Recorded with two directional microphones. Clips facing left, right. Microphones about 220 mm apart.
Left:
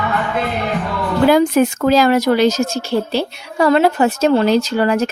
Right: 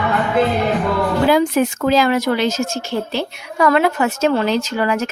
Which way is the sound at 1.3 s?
45° left (ahead or behind).